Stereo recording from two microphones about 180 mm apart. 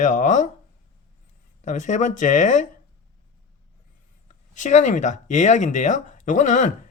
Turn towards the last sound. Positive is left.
turn(degrees=45)  # may be behind; listen again after turning